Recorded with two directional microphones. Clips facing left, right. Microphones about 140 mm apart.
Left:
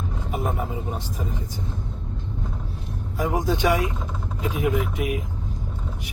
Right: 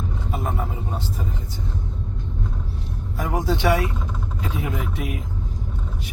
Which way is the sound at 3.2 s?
20° left (ahead or behind).